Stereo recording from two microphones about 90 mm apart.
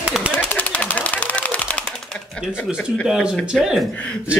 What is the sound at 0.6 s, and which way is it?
Machine gun, 15° left (ahead or behind).